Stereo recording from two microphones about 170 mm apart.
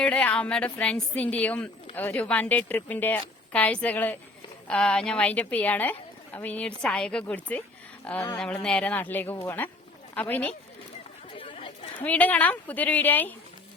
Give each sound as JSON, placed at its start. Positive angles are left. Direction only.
{"t": 0.0, "sound": "speech", "side_deg": 5}
{"t": 11.3, "sound": "chatter", "side_deg": 30}
{"t": 12.0, "sound": "speech", "side_deg": 10}